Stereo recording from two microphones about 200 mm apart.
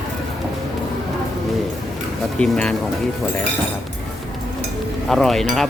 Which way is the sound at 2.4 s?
5° left (ahead or behind).